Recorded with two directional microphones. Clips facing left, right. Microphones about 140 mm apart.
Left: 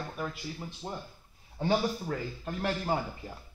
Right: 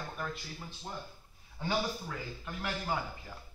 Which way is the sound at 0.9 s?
25° left (ahead or behind).